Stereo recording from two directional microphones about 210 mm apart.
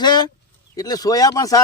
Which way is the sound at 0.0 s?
20° left (ahead or behind).